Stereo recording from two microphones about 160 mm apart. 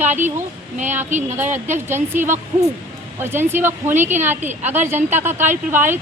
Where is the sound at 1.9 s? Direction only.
15° right (ahead or behind).